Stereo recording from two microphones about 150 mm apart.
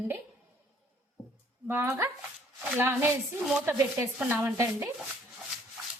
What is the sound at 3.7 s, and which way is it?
A woman's voice, 15° right (ahead or behind).